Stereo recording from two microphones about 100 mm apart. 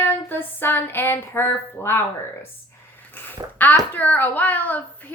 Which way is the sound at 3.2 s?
20° left (ahead or behind).